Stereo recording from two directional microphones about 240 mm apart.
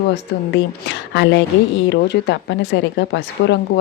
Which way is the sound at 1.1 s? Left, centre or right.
Left.